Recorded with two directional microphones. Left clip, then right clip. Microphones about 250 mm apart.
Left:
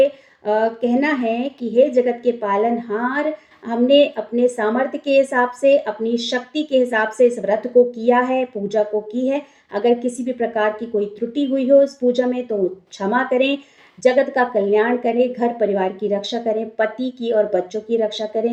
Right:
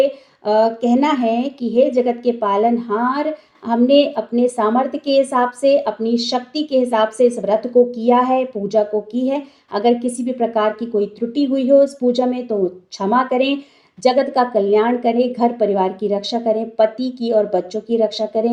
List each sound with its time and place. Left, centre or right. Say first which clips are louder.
0.0 s a woman's voice: even; centre